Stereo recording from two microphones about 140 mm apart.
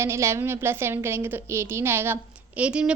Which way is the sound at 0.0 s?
20° right (ahead or behind).